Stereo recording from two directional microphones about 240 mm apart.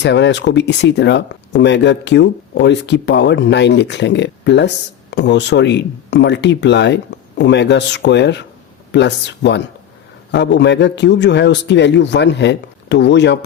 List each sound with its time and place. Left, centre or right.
0.0 s speech: left